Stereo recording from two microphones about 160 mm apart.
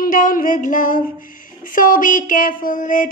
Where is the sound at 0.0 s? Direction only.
55° left (ahead or behind).